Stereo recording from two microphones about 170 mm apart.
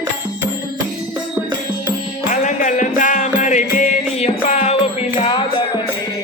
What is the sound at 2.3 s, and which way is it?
Music, 50° left (ahead or behind).